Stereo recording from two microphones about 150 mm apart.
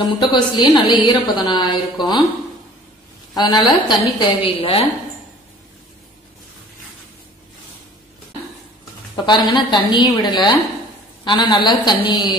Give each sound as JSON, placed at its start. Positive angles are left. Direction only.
{"t": 0.0, "sound": "a woman's voice", "side_deg": 30}
{"t": 3.3, "sound": "a woman's voice", "side_deg": 30}
{"t": 9.2, "sound": "a woman's voice", "side_deg": 30}